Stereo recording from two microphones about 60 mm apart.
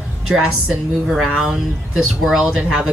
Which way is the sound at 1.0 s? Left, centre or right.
Centre.